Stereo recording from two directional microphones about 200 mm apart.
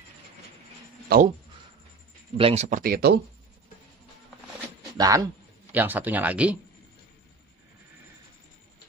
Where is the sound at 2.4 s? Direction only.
30° right (ahead or behind); by 3.1 s 50° right (ahead or behind).